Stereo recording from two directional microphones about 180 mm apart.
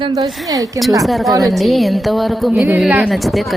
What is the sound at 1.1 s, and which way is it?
Speech, centre (ahead or behind).